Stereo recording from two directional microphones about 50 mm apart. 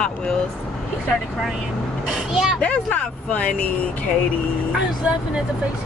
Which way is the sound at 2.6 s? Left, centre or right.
Left.